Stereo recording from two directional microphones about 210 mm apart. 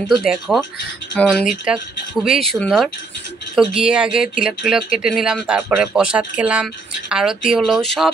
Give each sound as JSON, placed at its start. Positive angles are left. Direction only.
{"t": 0.1, "sound": "speech", "side_deg": 0}